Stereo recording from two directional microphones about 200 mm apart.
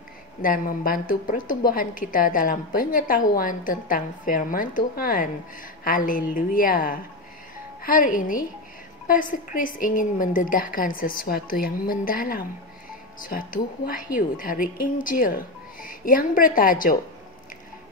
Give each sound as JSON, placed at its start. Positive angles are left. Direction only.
{"t": 0.4, "sound": "a woman's voice", "side_deg": 45}